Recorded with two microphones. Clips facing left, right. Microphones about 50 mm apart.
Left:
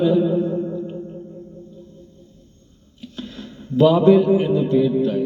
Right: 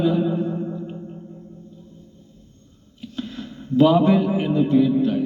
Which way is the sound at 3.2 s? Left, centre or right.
Right.